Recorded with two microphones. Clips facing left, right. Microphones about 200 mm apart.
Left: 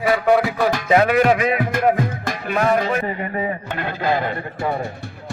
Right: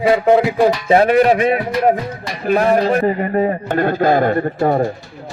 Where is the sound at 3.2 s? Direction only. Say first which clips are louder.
Right 7 dB; 45° right (ahead or behind).